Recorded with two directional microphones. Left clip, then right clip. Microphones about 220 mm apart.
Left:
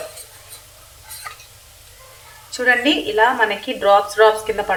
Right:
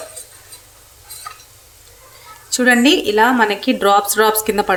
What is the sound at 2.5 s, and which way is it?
A woman's voice, 60° right (ahead or behind).